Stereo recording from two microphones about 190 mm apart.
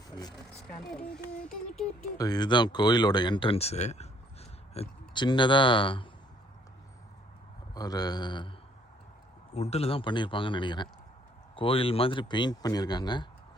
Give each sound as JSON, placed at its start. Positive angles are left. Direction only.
{"t": 2.1, "sound": "speech", "side_deg": 20}
{"t": 7.7, "sound": "speech", "side_deg": 20}
{"t": 9.6, "sound": "speech", "side_deg": 35}